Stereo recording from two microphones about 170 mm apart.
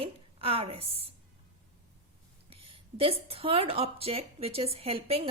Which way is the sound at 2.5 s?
35° right (ahead or behind).